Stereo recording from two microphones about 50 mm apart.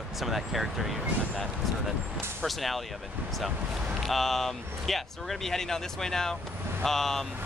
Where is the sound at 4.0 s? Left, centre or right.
Centre.